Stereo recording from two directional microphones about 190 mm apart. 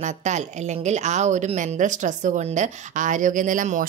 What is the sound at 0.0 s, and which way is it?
A woman's voice, 40° right (ahead or behind).